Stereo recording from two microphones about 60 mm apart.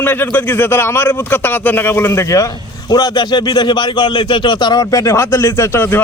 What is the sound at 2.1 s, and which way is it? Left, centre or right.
Speech, left.